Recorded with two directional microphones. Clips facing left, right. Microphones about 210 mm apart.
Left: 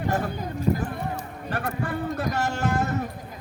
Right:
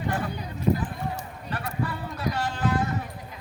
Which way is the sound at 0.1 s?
45° left (ahead or behind).